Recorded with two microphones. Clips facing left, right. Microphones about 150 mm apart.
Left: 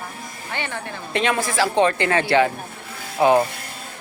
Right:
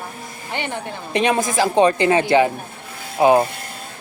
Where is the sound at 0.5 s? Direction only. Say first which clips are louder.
Right 3 dB; 20° right (ahead or behind).